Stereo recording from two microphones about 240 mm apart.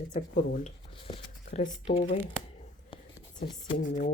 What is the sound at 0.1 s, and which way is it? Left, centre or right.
Speech, left.